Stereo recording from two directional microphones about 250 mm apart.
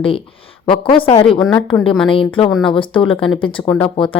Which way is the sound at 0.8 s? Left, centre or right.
Left.